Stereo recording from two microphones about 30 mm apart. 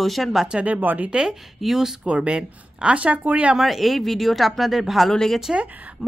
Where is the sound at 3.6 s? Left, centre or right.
Centre.